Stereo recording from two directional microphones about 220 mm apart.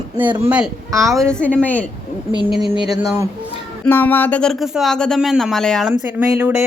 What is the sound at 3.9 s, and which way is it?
A woman's voice, 10° left (ahead or behind).